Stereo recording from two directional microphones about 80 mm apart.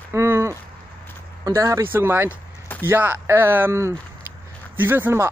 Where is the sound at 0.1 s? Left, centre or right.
Right.